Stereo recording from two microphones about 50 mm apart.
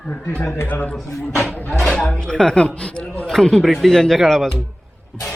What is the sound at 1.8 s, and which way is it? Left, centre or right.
Speech, centre.